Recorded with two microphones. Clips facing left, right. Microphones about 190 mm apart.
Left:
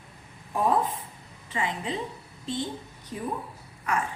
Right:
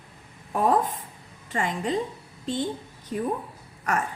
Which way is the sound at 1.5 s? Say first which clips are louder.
Right 4 dB; 45° right (ahead or behind).